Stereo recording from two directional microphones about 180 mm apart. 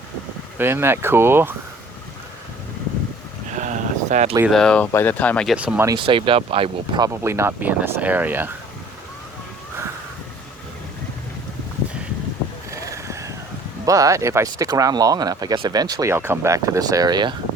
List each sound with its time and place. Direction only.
0.6 s speech: 15° right (ahead or behind)
3.5 s a sound: 45° right (ahead or behind)
4.4 s speech: 5° left (ahead or behind)
5.5 s speech: 10° right (ahead or behind)
5.9 s speech: 30° right (ahead or behind)
7.1 s speech: 15° right (ahead or behind)
12.7 s vehicle: 15° right (ahead or behind)
13.8 s speech: 20° right (ahead or behind)